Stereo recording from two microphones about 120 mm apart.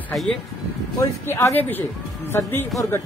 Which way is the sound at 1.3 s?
25° left (ahead or behind).